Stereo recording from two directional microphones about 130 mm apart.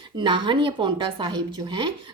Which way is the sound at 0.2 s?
40° right (ahead or behind).